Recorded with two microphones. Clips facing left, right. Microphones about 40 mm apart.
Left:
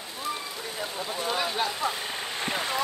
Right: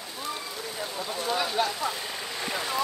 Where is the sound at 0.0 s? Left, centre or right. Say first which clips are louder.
Left 2 dB; centre.